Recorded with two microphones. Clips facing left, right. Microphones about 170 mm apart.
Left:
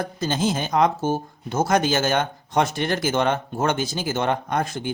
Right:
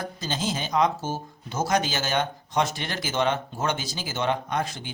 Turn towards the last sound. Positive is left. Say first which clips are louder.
# left 4 dB
turn(degrees=50)  # may be behind; listen again after turning